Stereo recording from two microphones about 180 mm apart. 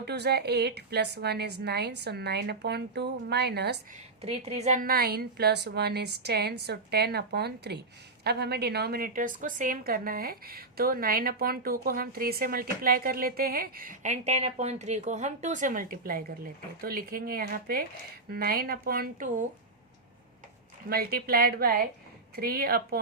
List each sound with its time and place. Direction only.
0.0 s a woman's voice: 65° right (ahead or behind)
4.2 s a woman's voice: 35° right (ahead or behind)
20.9 s a woman's voice: 55° right (ahead or behind)